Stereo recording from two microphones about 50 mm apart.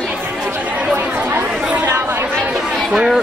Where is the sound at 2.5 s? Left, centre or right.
Centre.